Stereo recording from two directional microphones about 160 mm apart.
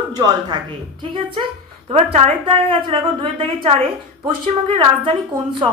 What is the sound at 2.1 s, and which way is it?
A woman's voice, 40° right (ahead or behind).